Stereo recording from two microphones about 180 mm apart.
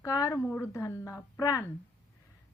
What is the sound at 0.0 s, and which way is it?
Speech, 15° left (ahead or behind).